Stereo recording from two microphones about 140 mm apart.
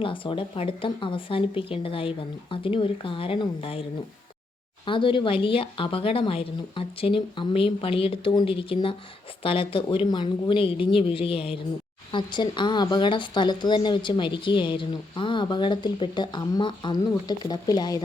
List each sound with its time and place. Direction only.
0.0 s a woman's voice: 40° left (ahead or behind)
4.9 s a woman's voice: 35° left (ahead or behind)